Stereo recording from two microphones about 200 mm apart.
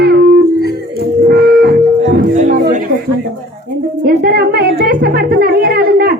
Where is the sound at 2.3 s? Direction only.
40° right (ahead or behind).